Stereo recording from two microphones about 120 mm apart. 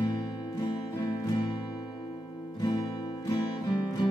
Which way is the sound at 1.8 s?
40° left (ahead or behind).